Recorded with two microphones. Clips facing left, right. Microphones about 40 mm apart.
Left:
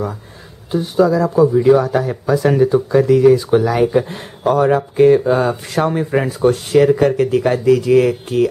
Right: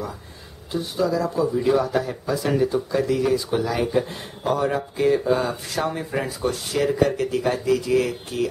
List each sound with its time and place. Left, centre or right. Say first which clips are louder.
0.7 s speech: left 9 dB; left
2.3 s speech: left 8 dB; left